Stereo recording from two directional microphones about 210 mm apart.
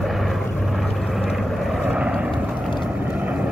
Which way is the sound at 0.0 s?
Centre (ahead or behind).